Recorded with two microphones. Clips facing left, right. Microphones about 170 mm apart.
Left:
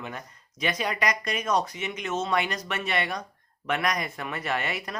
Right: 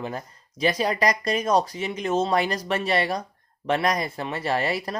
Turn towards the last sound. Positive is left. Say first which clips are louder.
# right 5 dB
turn(degrees=-35)  # may be behind; listen again after turning